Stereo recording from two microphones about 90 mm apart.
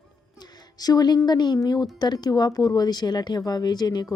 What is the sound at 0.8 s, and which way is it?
A woman's voice, 45° left (ahead or behind).